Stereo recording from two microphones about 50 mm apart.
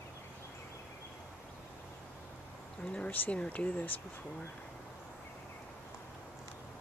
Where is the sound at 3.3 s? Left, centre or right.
Left.